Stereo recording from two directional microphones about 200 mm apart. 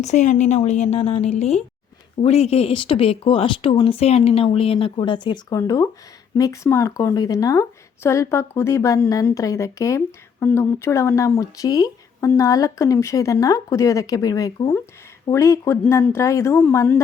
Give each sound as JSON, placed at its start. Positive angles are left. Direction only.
{"t": 0.0, "sound": "a woman's voice", "side_deg": 35}